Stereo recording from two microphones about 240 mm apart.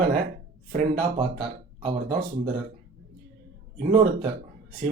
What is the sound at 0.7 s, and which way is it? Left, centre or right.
Speech, right.